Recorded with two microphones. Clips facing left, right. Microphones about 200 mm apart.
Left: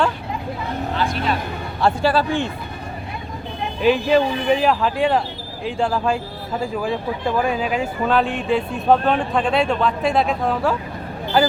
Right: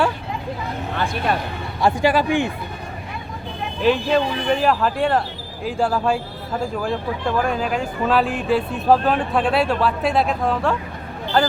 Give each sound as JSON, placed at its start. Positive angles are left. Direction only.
{"t": 0.9, "sound": "vehicle", "side_deg": -55}
{"t": 1.8, "sound": "a man's voice", "side_deg": -15}
{"t": 3.8, "sound": "speech", "side_deg": 0}